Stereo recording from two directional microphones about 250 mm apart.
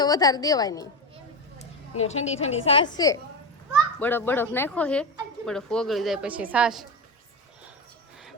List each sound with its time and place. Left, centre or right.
0.0 s speech: centre
2.0 s a woman's voice: left; by 6.8 s centre